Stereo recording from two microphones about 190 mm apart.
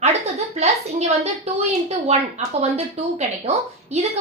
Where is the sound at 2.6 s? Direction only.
35° right (ahead or behind).